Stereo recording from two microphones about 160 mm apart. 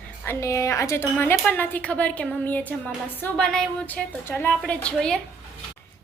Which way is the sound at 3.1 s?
10° left (ahead or behind).